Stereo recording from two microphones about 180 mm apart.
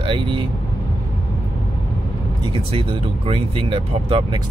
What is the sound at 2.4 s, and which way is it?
Speech, 30° right (ahead or behind).